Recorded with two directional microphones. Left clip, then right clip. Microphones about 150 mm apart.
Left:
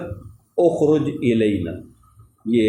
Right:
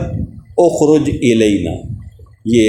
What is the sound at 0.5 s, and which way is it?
A man's voice, 50° right (ahead or behind).